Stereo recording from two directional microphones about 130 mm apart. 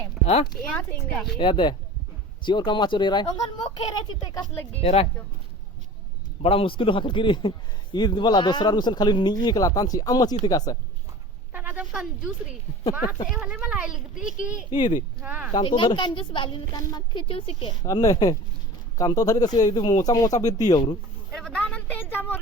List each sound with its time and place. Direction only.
1.1 s speech: centre (ahead or behind)
1.4 s a man's voice: 35° left (ahead or behind)
4.8 s speech: 50° left (ahead or behind)
6.4 s a man's voice: 45° left (ahead or behind); by 10.8 s 30° left (ahead or behind)
11.5 s a woman's voice: 10° right (ahead or behind)
14.7 s a man's voice: 35° left (ahead or behind)
15.2 s a child's voice: 10° right (ahead or behind)
15.5 s a man's voice: 35° left (ahead or behind)
17.2 s speech: 45° left (ahead or behind)
17.8 s speech: 25° left (ahead or behind)
21.3 s a woman's voice: 5° left (ahead or behind)